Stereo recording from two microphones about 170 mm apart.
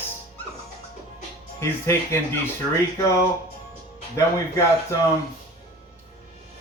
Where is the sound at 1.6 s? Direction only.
15° left (ahead or behind).